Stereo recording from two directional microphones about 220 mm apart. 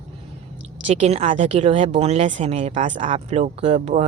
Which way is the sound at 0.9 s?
30° right (ahead or behind).